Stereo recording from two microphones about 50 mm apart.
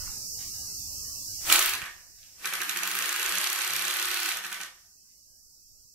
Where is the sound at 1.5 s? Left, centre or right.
Centre.